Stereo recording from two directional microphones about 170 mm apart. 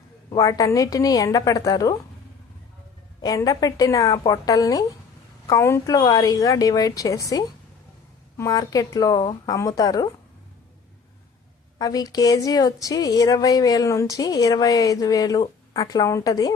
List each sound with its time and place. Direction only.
0.3 s a woman's voice: 20° left (ahead or behind)
3.2 s a woman's voice: 20° left (ahead or behind)
11.8 s a woman's voice: 20° left (ahead or behind)